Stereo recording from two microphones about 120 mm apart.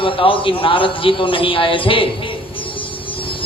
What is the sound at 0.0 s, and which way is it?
Speech, 45° left (ahead or behind).